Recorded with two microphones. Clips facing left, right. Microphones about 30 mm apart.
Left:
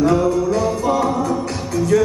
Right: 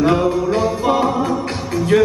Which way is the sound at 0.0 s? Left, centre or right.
Right.